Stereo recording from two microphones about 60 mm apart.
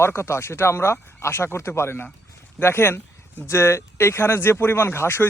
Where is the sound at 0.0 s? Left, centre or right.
Left.